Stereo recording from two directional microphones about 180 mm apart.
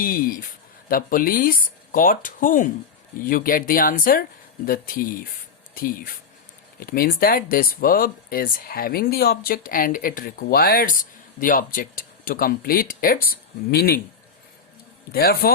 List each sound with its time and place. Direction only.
0.0 s speech: 55° left (ahead or behind)
15.1 s a man's voice: 60° left (ahead or behind)